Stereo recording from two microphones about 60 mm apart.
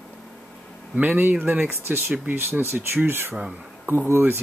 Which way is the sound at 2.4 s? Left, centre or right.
Right.